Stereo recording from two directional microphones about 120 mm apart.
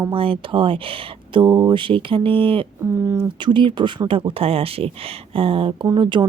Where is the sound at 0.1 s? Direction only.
50° right (ahead or behind).